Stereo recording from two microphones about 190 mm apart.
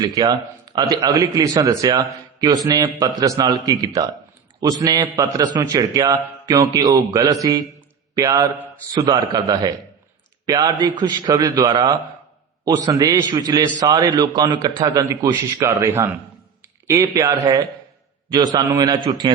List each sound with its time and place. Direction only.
0.0 s a man's voice: 20° right (ahead or behind)